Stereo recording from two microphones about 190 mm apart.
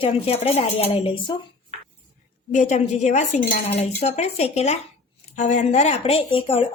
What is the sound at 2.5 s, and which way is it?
A woman's voice, 40° left (ahead or behind).